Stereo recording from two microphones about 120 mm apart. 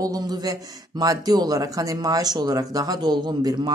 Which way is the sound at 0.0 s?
30° right (ahead or behind).